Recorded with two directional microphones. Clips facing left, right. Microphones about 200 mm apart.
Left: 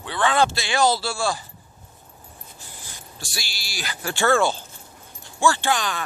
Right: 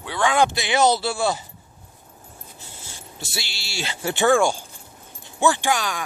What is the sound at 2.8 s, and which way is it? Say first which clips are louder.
Speech: right 3 dB; 25° right (ahead or behind).